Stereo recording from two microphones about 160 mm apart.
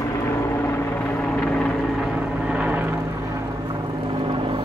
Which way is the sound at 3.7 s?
30° right (ahead or behind).